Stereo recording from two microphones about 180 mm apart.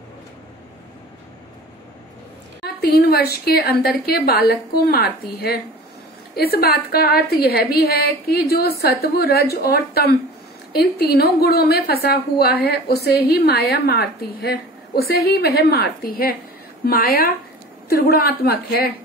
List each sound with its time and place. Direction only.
2.6 s a woman's voice: 60° left (ahead or behind)